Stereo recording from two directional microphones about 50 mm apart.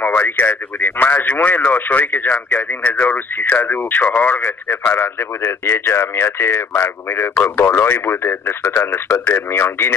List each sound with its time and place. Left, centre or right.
0.2 s speech: left